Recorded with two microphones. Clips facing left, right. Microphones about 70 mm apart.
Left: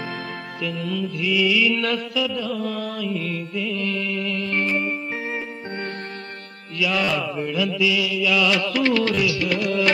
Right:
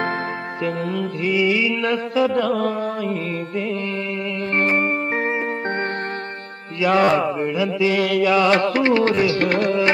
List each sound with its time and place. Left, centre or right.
0.7 s music: right
1.3 s music: right
2.1 s music: right
2.7 s music: right
6.8 s music: right
7.9 s music: right